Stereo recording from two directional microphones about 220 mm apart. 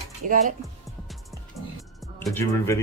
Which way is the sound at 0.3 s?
35° right (ahead or behind).